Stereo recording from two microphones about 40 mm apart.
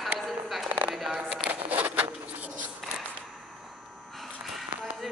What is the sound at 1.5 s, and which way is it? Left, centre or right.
Zipper, right.